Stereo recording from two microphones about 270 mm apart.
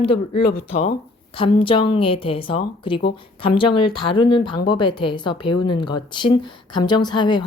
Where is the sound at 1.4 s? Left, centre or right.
Centre.